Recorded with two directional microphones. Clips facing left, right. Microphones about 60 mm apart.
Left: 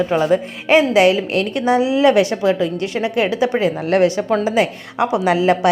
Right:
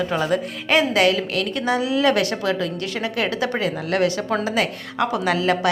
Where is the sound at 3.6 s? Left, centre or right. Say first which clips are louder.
Left 6 dB; left.